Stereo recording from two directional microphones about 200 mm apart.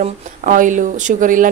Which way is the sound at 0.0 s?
40° right (ahead or behind).